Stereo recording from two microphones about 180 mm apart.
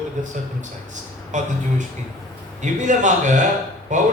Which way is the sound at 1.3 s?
40° right (ahead or behind).